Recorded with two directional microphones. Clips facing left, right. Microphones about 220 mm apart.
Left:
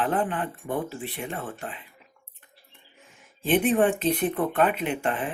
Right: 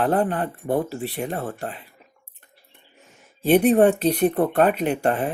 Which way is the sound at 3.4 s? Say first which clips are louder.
Right 6 dB; 40° right (ahead or behind).